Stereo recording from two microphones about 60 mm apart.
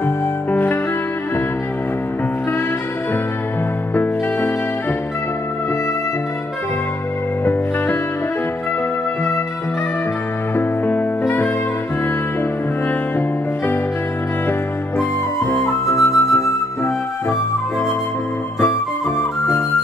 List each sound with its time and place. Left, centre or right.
0.5 s music: left
3.9 s music: left
10.5 s music: left
15.5 s flute: left
16.2 s music: left
18.7 s flute: left